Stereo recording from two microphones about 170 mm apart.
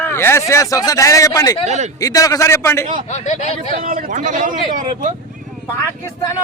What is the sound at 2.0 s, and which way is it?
Speech, 20° left (ahead or behind).